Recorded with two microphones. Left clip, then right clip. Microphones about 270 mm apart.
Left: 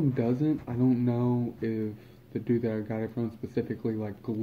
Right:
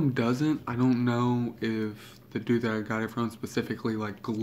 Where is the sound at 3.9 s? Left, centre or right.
Right.